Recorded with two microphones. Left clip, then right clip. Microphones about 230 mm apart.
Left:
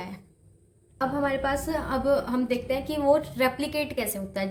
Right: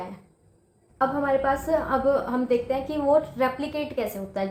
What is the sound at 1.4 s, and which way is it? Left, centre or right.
A woman's voice, left.